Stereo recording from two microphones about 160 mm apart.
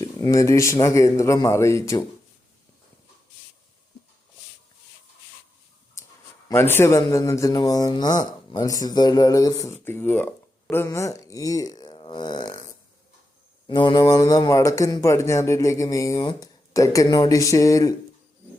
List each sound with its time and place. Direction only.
0.0 s speech: 20° left (ahead or behind)
6.5 s speech: 15° left (ahead or behind)
13.7 s speech: 30° left (ahead or behind)